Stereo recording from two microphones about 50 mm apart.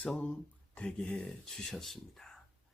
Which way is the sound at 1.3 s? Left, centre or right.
Centre.